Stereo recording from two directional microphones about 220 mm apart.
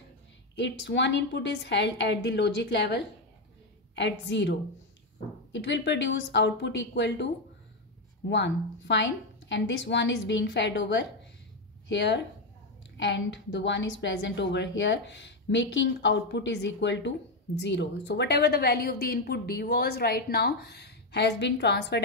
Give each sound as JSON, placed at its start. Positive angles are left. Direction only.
{"t": 0.6, "sound": "a woman's voice", "side_deg": 50}
{"t": 8.3, "sound": "a woman's voice", "side_deg": 55}